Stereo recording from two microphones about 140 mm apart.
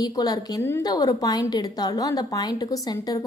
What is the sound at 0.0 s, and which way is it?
A woman's voice, 25° left (ahead or behind).